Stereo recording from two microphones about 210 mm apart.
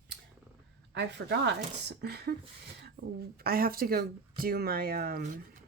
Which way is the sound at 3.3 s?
45° right (ahead or behind).